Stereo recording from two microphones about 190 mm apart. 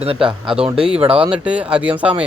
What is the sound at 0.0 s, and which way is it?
Speech, 30° right (ahead or behind).